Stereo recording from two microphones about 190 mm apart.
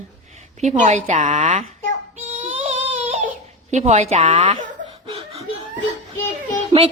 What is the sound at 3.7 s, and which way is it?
Speech, 35° right (ahead or behind).